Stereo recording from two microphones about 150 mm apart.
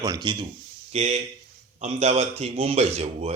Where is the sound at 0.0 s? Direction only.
25° right (ahead or behind).